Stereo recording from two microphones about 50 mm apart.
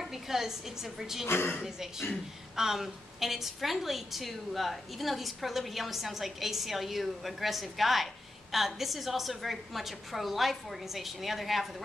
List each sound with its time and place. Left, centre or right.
0.0 s a sound: centre
0.9 s a woman's voice: centre
1.2 s a woman's voice: left
1.6 s a woman's voice: centre